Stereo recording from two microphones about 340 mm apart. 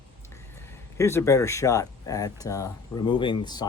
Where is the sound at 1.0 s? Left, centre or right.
Centre.